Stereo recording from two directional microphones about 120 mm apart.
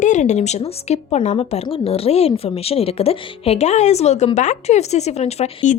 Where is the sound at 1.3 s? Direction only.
60° left (ahead or behind).